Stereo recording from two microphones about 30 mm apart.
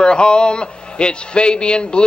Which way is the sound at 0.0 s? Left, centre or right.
Left.